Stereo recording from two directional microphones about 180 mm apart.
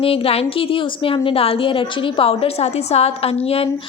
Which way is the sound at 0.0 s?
30° left (ahead or behind).